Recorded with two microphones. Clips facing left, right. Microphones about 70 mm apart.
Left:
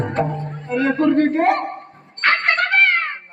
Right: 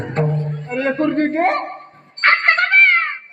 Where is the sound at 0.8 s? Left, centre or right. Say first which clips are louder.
Left 1 dB; right.